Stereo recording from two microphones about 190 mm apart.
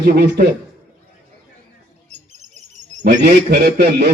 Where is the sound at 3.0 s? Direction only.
60° right (ahead or behind).